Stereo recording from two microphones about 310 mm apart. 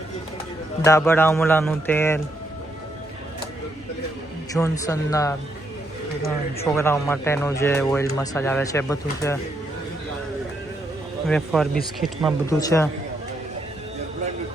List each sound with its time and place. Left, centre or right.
0.9 s speech: centre
4.5 s speech: centre
6.7 s speech: centre
11.3 s speech: centre
12.5 s speech: centre